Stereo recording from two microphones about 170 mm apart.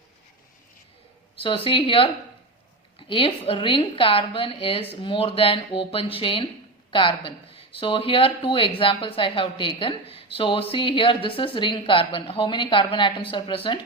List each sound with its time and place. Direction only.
1.4 s speech: 30° left (ahead or behind)
3.1 s speech: 30° left (ahead or behind)